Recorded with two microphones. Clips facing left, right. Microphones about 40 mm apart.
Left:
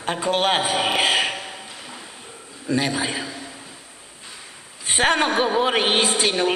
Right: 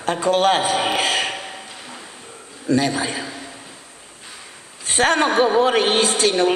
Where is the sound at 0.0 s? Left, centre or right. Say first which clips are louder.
Right 4 dB; centre.